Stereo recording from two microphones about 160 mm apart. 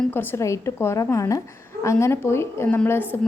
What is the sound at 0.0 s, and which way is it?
A woman's voice, 10° left (ahead or behind).